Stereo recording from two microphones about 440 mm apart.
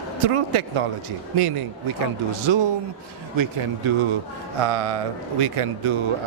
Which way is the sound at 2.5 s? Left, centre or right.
Right.